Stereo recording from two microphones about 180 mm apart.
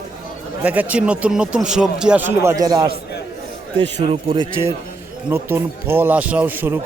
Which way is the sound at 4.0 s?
30° right (ahead or behind).